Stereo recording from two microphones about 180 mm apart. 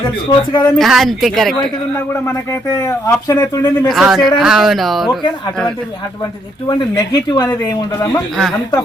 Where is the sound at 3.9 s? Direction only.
Centre (ahead or behind).